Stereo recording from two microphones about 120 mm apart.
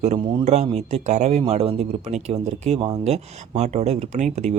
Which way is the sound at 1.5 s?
60° right (ahead or behind).